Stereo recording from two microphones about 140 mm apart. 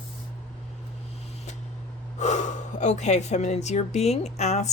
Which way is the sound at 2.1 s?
55° left (ahead or behind).